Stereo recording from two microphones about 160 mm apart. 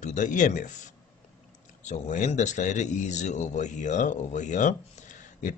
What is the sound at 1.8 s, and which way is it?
Speech, 50° left (ahead or behind).